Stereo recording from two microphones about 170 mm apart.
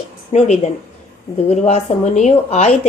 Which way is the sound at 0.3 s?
45° left (ahead or behind).